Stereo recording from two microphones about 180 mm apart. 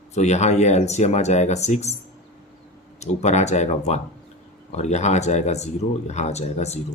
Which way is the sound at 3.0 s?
40° left (ahead or behind).